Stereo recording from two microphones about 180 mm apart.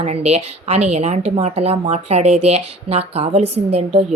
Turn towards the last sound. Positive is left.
turn(degrees=-35)  # may be behind; listen again after turning